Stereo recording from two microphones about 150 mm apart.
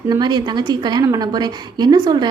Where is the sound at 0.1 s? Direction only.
30° right (ahead or behind).